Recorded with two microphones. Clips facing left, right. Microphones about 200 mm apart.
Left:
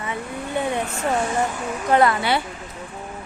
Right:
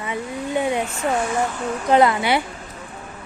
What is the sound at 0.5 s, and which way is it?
Speech, 15° right (ahead or behind).